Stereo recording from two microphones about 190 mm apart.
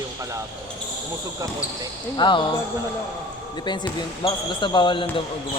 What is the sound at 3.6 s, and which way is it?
Speech, 20° left (ahead or behind).